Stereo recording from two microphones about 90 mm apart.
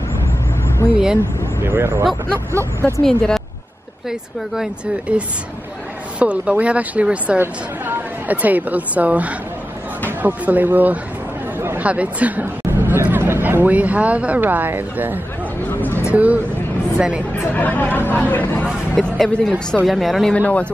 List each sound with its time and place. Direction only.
1.6 s speech: 25° right (ahead or behind)
3.0 s speech: 5° left (ahead or behind)
5.1 s speech: 15° right (ahead or behind)
15.7 s a sound: 25° left (ahead or behind)
16.1 s speech: 15° right (ahead or behind)
17.6 s speech: 20° left (ahead or behind)
18.9 s speech: 5° left (ahead or behind)
20.3 s speech: 15° left (ahead or behind)